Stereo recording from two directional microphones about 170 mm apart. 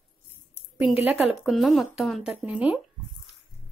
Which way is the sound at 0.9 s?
10° right (ahead or behind).